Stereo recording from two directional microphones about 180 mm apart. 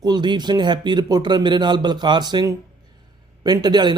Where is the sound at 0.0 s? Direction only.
25° right (ahead or behind).